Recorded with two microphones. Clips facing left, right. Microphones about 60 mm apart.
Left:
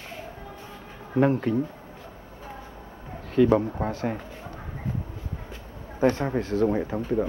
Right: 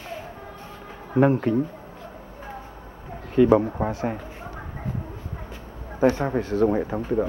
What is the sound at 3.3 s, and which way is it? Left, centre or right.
Speech, centre.